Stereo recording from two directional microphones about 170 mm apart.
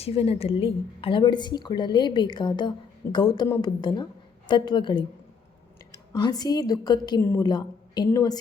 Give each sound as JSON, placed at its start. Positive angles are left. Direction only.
{"t": 0.0, "sound": "a woman's voice", "side_deg": 35}